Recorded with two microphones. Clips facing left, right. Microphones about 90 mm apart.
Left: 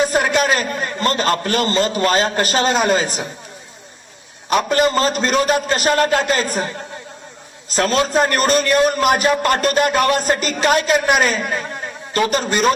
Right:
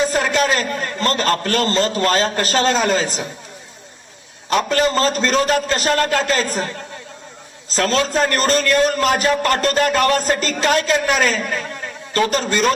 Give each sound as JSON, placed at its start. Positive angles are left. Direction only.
{"t": 0.0, "sound": "a sound", "side_deg": 15}
{"t": 0.4, "sound": "a man's voice", "side_deg": 20}
{"t": 4.4, "sound": "a man's voice", "side_deg": 20}